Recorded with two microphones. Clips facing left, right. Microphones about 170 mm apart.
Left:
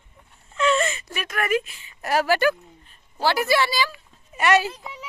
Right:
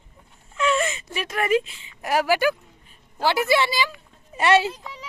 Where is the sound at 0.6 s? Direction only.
10° right (ahead or behind).